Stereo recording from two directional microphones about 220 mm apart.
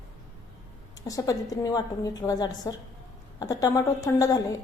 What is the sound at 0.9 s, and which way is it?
A woman's voice, 15° left (ahead or behind).